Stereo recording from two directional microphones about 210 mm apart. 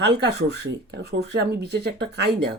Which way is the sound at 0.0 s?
55° right (ahead or behind).